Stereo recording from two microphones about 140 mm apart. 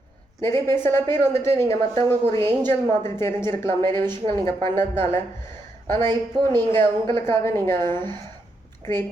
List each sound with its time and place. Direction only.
0.4 s speech: 15° left (ahead or behind)